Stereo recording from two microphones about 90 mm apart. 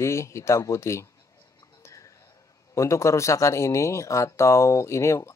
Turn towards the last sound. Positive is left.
turn(degrees=35)  # may be behind; listen again after turning